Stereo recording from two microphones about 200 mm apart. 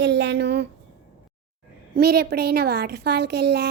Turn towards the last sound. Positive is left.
turn(degrees=-55)  # may be behind; listen again after turning